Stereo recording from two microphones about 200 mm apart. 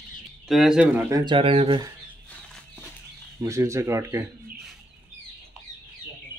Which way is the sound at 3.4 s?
15° right (ahead or behind).